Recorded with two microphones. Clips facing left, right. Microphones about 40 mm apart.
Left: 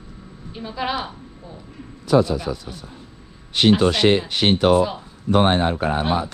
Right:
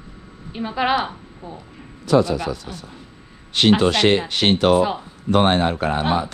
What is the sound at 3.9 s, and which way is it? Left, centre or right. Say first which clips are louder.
A man's voice: even; right.